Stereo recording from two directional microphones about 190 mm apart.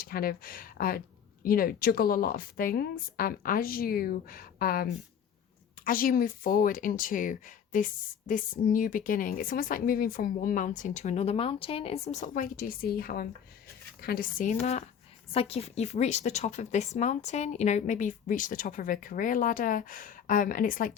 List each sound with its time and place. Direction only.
0.0 s a woman's voice: 50° left (ahead or behind)